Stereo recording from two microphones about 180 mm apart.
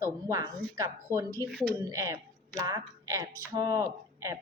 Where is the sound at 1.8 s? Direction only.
20° right (ahead or behind).